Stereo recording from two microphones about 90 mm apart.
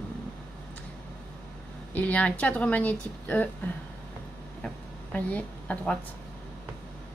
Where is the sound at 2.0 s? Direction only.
15° left (ahead or behind).